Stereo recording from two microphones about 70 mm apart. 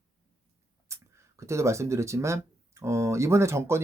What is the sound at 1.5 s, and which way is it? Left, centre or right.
Speech, right.